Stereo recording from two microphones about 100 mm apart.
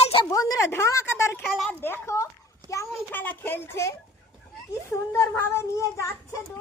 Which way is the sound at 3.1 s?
20° left (ahead or behind).